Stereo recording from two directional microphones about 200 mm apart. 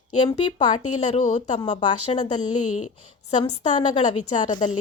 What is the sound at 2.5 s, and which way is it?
Speech, 90° left.